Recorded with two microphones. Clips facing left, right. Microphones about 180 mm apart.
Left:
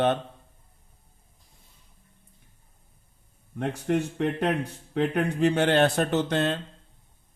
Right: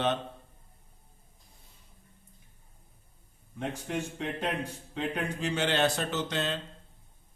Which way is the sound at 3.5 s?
60° left (ahead or behind).